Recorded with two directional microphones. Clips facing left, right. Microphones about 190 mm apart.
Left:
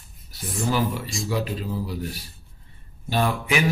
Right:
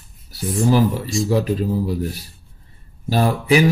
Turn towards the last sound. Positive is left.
turn(degrees=-35)  # may be behind; listen again after turning